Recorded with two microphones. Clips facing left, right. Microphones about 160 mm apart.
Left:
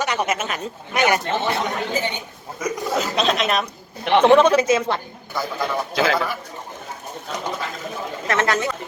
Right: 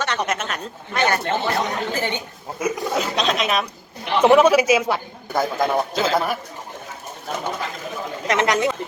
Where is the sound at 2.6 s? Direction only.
5° right (ahead or behind).